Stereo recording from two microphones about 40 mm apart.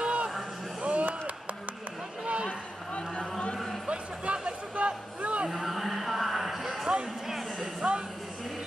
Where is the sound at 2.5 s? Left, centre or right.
Left.